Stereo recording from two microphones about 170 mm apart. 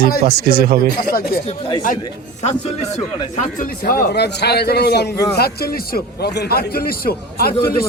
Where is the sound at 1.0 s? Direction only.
60° left (ahead or behind).